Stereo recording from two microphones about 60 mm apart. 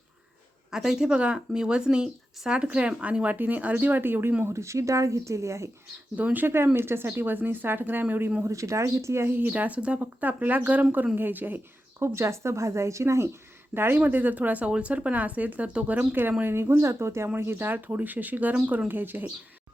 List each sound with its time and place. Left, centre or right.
0.7 s a woman's voice: centre; by 4.4 s right
4.5 s speech: right
6.1 s speech: right
8.4 s speech: right
9.3 s a woman's voice: right
13.7 s a woman's voice: right
16.4 s speech: right